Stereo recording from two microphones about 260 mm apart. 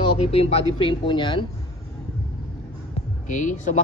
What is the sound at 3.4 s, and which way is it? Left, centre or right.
Speech, left.